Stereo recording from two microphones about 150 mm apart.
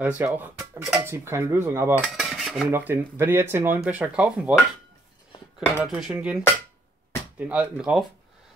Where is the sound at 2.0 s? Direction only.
5° right (ahead or behind).